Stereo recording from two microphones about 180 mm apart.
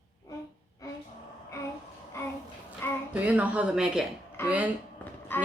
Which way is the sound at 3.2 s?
10° right (ahead or behind).